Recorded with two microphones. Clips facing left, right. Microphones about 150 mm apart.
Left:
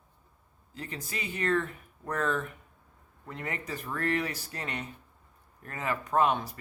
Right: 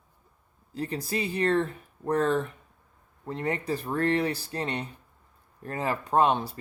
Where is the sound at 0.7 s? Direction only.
35° right (ahead or behind).